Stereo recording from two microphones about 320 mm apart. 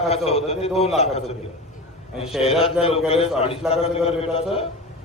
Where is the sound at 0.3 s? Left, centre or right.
Centre.